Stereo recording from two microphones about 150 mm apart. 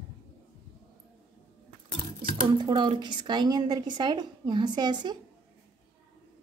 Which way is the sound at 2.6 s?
30° right (ahead or behind).